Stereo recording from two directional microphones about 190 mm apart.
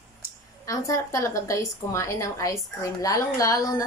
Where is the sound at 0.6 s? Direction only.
15° left (ahead or behind).